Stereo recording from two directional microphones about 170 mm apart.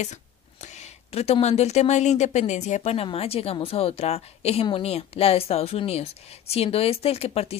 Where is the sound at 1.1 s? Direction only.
40° left (ahead or behind).